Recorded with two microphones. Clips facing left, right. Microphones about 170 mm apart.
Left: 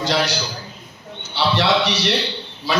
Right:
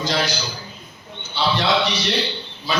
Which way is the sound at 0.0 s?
75° left (ahead or behind).